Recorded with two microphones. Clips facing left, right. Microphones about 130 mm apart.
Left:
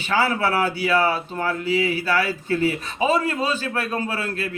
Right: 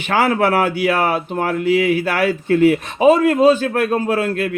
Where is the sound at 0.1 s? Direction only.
55° right (ahead or behind).